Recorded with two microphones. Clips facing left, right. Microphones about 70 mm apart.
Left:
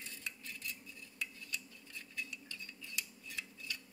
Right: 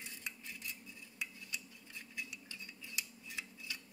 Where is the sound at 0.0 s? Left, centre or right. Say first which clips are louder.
Even; centre.